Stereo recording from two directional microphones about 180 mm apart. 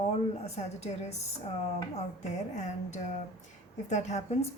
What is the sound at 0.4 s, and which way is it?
Speech, 40° left (ahead or behind).